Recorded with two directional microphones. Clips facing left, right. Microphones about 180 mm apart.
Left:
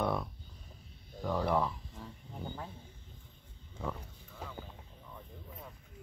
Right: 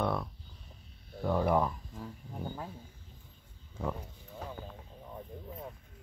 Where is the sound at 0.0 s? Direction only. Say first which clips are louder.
Right 1 dB; centre (ahead or behind).